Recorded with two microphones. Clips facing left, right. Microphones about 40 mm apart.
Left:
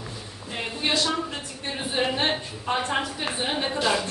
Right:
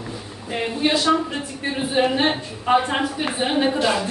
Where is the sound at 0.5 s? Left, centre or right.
Centre.